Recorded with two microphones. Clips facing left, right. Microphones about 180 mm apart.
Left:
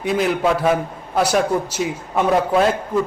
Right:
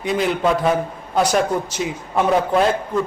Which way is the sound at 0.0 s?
5° left (ahead or behind).